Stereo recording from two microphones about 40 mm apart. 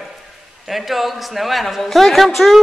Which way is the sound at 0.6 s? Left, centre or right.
Centre.